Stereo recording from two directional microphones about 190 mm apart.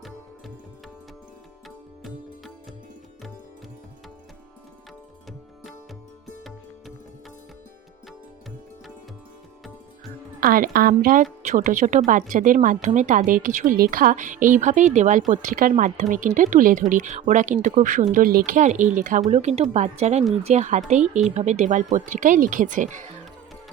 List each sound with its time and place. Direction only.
1.6 s music: centre (ahead or behind)
10.4 s a woman's voice: 50° right (ahead or behind)